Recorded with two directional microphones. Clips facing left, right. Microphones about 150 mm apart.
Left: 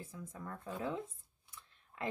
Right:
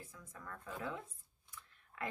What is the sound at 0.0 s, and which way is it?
Speech, 25° left (ahead or behind).